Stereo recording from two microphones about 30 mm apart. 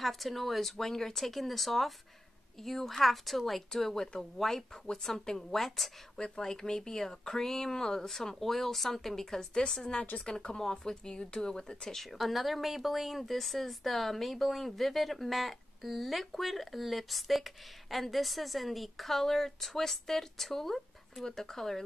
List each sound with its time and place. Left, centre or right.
0.0 s speech: centre
3.7 s speech: centre
6.1 s speech: left
12.0 s speech: centre